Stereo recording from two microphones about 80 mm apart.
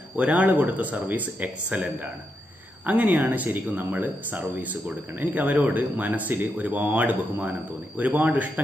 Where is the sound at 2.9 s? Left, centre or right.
Right.